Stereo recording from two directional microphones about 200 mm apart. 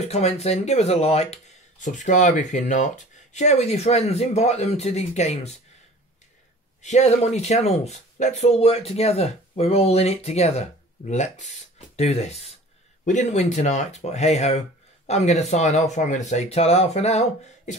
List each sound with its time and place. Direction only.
0.0 s speech: 30° left (ahead or behind)
6.8 s speech: 35° left (ahead or behind)